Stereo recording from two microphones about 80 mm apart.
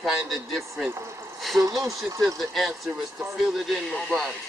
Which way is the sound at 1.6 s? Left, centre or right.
Right.